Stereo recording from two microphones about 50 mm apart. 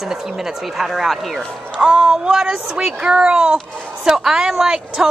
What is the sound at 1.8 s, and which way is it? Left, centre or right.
A woman's voice, centre.